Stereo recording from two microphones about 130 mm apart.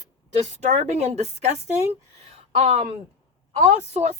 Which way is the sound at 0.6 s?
65° right (ahead or behind).